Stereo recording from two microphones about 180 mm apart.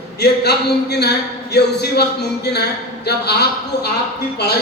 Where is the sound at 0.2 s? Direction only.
65° left (ahead or behind).